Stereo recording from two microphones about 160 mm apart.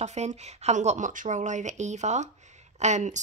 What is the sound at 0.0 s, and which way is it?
A woman's voice, 45° right (ahead or behind).